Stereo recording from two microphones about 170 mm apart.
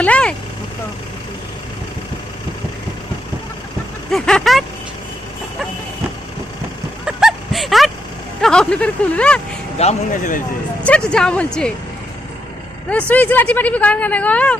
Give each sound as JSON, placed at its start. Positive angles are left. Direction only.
{"t": 0.0, "sound": "speech", "side_deg": 5}
{"t": 4.1, "sound": "speech", "side_deg": 0}
{"t": 7.0, "sound": "a sound", "side_deg": -5}
{"t": 8.4, "sound": "speech", "side_deg": 5}
{"t": 9.7, "sound": "a man's voice", "side_deg": 45}
{"t": 10.8, "sound": "speech", "side_deg": 5}
{"t": 12.9, "sound": "speech", "side_deg": 10}